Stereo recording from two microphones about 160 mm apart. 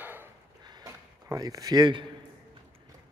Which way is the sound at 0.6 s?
25° right (ahead or behind).